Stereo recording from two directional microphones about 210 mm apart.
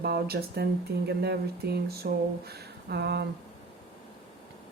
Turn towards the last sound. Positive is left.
turn(degrees=-50)  # may be behind; listen again after turning